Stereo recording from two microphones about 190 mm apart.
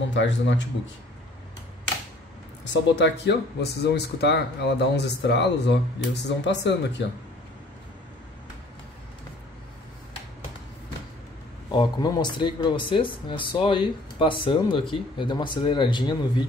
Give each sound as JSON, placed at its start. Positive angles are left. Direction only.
{"t": 0.1, "sound": "speech", "side_deg": 75}
{"t": 2.6, "sound": "speech", "side_deg": 65}
{"t": 11.7, "sound": "speech", "side_deg": 20}